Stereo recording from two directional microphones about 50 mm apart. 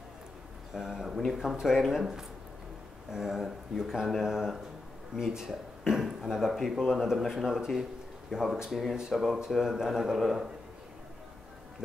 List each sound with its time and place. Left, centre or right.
0.7 s speech: centre